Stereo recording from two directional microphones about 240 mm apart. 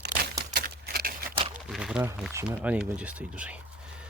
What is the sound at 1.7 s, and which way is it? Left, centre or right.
Speech, centre.